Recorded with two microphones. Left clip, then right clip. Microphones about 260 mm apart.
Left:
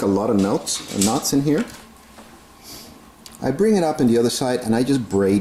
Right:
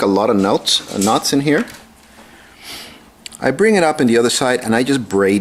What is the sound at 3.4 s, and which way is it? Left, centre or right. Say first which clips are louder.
Speech: right 6 dB; centre.